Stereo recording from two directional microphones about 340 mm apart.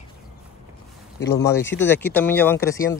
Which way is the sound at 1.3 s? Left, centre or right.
Centre.